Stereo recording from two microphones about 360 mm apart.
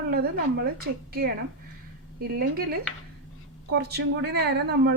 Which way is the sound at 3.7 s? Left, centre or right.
Right.